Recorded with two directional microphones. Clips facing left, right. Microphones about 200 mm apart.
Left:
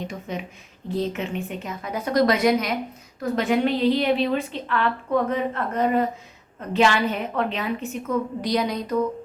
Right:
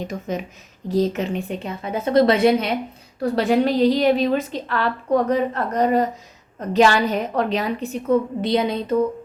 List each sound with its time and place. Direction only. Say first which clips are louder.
0.1 s a woman's voice: right 5 dB; 45° right (ahead or behind); by 9.0 s 25° right (ahead or behind)